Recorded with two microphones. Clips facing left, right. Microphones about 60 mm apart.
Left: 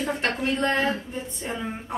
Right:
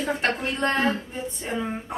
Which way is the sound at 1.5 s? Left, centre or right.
Centre.